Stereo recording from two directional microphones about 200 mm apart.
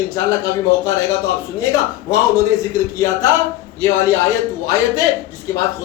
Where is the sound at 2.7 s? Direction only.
15° left (ahead or behind).